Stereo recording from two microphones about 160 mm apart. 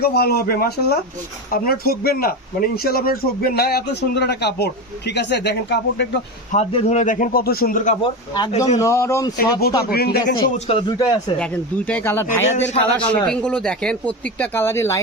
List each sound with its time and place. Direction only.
0.0 s speech: 80° left
6.7 s a man's voice: 45° left (ahead or behind)
8.0 s speech: 25° left (ahead or behind)
9.4 s speech: 75° left (ahead or behind)
10.7 s a man's voice: 35° left (ahead or behind)
10.9 s speech: 25° left (ahead or behind)
11.3 s speech: 10° left (ahead or behind)
12.7 s a man's voice: 30° left (ahead or behind)
13.2 s speech: 5° left (ahead or behind)